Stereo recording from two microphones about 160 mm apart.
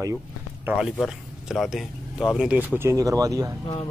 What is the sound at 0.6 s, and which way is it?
Speech, 5° right (ahead or behind).